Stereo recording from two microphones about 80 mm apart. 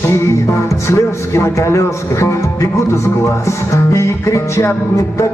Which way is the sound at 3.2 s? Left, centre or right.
Left.